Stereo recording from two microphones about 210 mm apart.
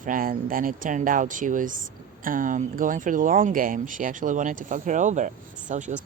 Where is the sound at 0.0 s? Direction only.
40° right (ahead or behind).